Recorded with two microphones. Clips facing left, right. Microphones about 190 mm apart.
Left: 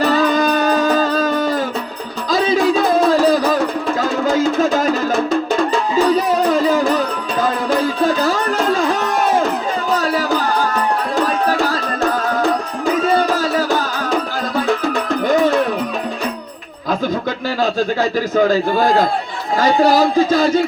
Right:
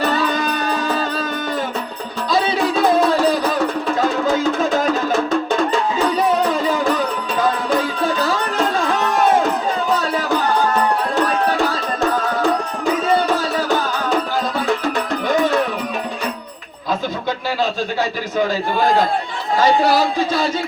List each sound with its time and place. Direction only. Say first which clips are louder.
0.2 s music: left 5 dB; 40° left (ahead or behind)
19.9 s speech: left 4 dB; 45° left (ahead or behind)